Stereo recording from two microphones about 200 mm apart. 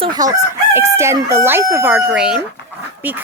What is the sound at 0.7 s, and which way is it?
Speech, 15° right (ahead or behind).